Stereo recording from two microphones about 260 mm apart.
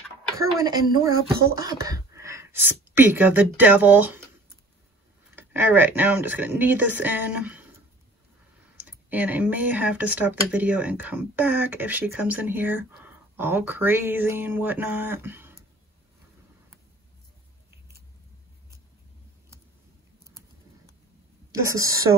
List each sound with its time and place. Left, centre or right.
0.6 s speech: centre
5.3 s speech: centre
8.7 s speech: centre
21.5 s speech: centre